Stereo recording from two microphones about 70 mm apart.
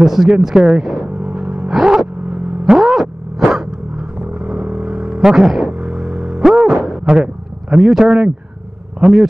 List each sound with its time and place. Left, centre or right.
0.0 s speech: centre
1.0 s vehicle: right
1.7 s gasp: centre
2.2 s vehicle: right
2.6 s vehicle: centre
5.2 s speech: centre
5.8 s a sound: centre
6.4 s a sound: centre
7.7 s speech: centre